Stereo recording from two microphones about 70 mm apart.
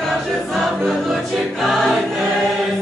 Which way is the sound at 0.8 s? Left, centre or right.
Centre.